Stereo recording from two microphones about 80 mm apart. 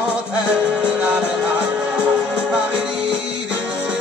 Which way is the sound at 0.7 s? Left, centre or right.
Centre.